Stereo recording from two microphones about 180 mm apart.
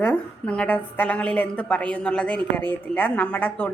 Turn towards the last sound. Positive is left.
turn(degrees=10)  # may be behind; listen again after turning